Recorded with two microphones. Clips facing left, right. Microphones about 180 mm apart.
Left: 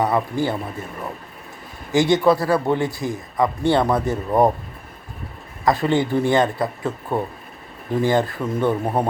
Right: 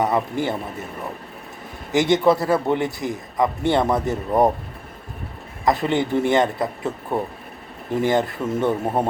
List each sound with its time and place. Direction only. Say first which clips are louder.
0.0 s a man's voice: left 1 dB; 20° right (ahead or behind)
1.9 s a man's voice: left 1 dB; 20° right (ahead or behind)
4.3 s speech: left 1 dB; centre (ahead or behind)
5.6 s a man's voice: left 1 dB; 20° right (ahead or behind)
8.0 s a man's voice: even; 20° right (ahead or behind)
8.8 s speech: even; centre (ahead or behind)